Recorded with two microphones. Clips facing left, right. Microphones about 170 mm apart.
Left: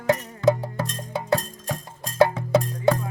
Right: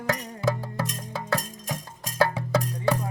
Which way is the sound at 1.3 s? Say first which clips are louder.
Left 2 dB; 20° right (ahead or behind).